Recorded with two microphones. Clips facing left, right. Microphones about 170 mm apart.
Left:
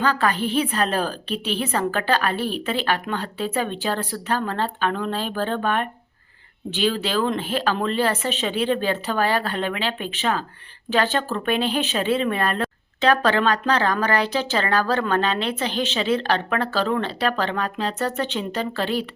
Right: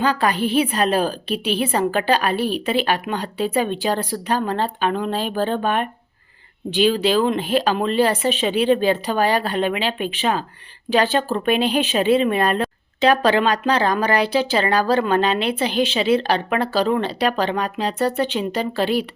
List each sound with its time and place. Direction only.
0.0 s a woman's voice: 15° right (ahead or behind)